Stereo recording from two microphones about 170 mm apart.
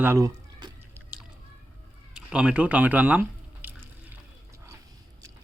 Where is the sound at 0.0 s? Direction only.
15° right (ahead or behind).